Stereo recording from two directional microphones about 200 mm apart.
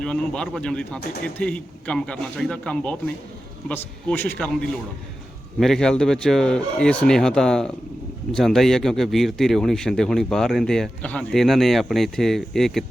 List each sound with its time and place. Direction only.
0.0 s a man's voice: 5° left (ahead or behind)